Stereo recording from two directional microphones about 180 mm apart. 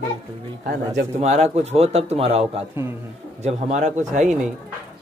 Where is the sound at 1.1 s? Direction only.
40° right (ahead or behind).